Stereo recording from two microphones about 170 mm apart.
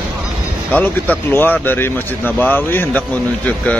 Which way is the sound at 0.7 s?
10° left (ahead or behind).